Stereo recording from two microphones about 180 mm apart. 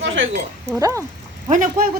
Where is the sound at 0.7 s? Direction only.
15° right (ahead or behind).